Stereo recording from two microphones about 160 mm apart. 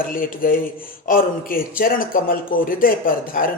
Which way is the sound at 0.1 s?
60° left (ahead or behind).